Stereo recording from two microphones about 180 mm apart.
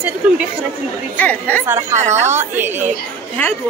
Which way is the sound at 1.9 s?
40° right (ahead or behind).